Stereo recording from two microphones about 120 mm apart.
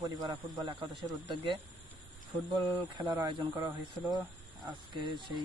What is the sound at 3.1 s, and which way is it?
Speech, 30° right (ahead or behind).